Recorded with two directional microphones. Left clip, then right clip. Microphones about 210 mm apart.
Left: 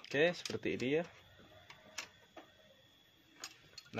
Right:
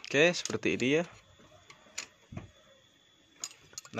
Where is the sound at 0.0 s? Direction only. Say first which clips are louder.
Right 7 dB; 20° right (ahead or behind).